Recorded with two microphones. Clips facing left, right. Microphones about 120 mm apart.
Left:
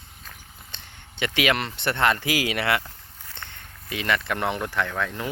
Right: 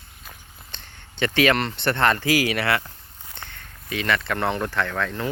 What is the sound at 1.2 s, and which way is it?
Speech, 10° left (ahead or behind).